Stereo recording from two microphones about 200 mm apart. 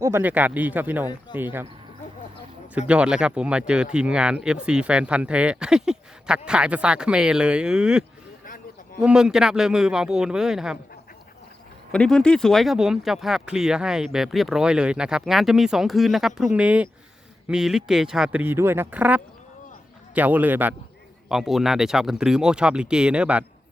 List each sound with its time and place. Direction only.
0.0 s speech: 10° right (ahead or behind)
1.3 s speech: 20° left (ahead or behind)
2.7 s speech: 5° right (ahead or behind)
11.9 s speech: 5° left (ahead or behind)